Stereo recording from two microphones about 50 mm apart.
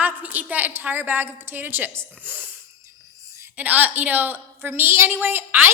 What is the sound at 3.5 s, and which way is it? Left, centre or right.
A woman's voice, right.